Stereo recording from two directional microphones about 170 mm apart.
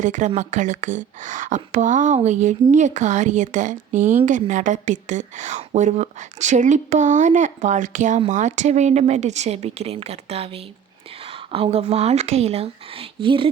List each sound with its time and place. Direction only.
0.0 s speech: 45° right (ahead or behind); by 13.5 s 30° right (ahead or behind)